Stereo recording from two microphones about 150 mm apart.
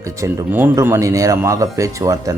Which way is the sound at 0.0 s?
15° right (ahead or behind).